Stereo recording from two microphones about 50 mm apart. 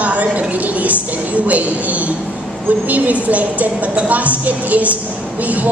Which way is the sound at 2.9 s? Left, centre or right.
Right.